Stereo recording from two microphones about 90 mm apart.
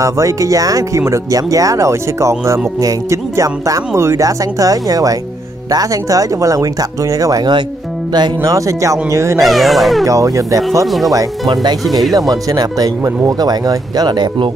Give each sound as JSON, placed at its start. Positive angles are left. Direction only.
{"t": 0.0, "sound": "speech", "side_deg": -35}
{"t": 9.4, "sound": "speech", "side_deg": 0}
{"t": 10.0, "sound": "speech", "side_deg": -40}